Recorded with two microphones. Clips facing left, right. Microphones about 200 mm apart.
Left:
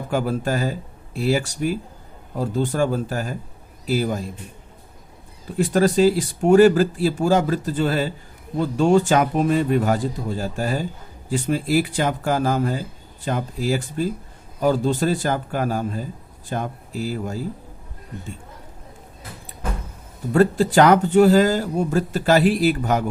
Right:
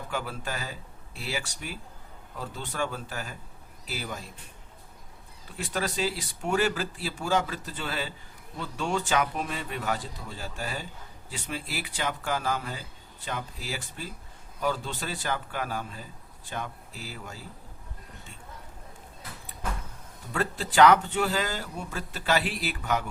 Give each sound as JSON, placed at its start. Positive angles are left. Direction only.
{"t": 0.1, "sound": "speech", "side_deg": 45}
{"t": 5.5, "sound": "speech", "side_deg": 45}
{"t": 20.3, "sound": "speech", "side_deg": 45}